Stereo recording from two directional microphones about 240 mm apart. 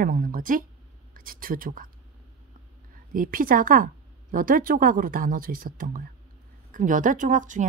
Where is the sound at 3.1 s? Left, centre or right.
Right.